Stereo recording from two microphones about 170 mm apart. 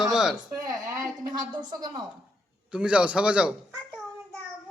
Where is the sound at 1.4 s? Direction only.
25° right (ahead or behind).